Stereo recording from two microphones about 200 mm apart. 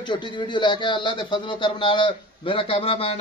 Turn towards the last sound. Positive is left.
turn(degrees=30)  # may be behind; listen again after turning